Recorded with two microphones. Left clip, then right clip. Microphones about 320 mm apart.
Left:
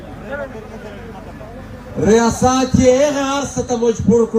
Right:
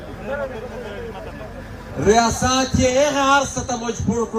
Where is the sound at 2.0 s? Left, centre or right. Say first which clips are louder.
Left 2 dB; left.